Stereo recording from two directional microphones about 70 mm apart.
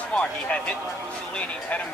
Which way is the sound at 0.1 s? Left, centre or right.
Centre.